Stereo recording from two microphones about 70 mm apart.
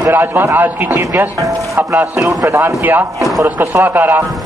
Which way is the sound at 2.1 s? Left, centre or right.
Right.